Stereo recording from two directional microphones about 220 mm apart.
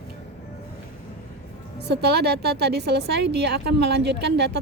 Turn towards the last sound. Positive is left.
turn(degrees=-50)  # may be behind; listen again after turning